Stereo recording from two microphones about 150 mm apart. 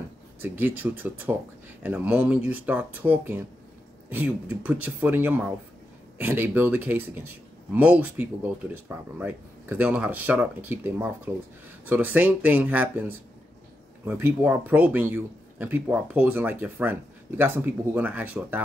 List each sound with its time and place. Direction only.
0.4 s speech: 10° right (ahead or behind)